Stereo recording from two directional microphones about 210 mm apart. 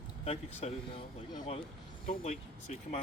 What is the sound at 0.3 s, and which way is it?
Speech, 30° left (ahead or behind).